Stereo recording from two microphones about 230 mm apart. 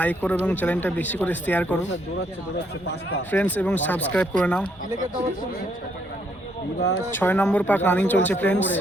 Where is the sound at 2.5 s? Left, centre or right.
Left.